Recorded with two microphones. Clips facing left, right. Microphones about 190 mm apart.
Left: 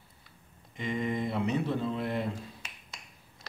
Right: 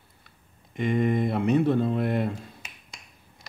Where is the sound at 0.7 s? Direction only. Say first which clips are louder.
Right 8 dB; 60° right (ahead or behind).